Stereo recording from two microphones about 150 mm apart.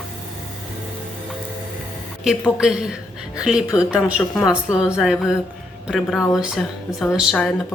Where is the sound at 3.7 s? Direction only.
20° left (ahead or behind).